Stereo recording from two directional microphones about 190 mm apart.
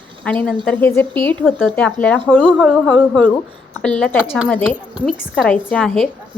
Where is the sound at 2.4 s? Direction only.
5° right (ahead or behind).